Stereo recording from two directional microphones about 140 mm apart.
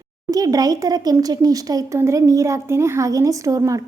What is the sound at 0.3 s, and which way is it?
A woman's voice, 25° right (ahead or behind).